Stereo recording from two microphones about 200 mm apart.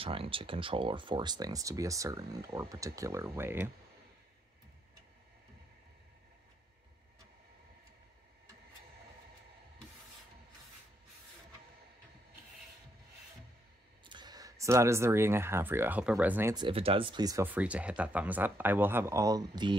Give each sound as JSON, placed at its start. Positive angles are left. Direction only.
{"t": 0.0, "sound": "speech", "side_deg": -25}
{"t": 14.0, "sound": "speech", "side_deg": -20}
{"t": 16.5, "sound": "speech", "side_deg": -25}